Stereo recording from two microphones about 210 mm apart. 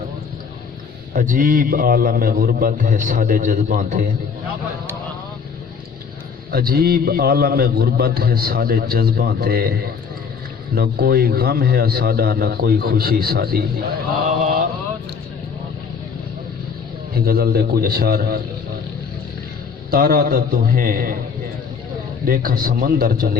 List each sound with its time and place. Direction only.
1.1 s a man's voice: 40° right (ahead or behind)
6.5 s a man's voice: 45° right (ahead or behind)
10.8 s a man's voice: 45° right (ahead or behind)
17.2 s a man's voice: 45° right (ahead or behind)
19.9 s a man's voice: 45° right (ahead or behind)
22.3 s a man's voice: 45° right (ahead or behind)